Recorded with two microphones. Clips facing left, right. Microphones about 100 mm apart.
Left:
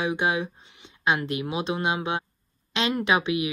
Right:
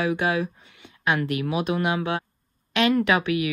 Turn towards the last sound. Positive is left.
turn(degrees=20)  # may be behind; listen again after turning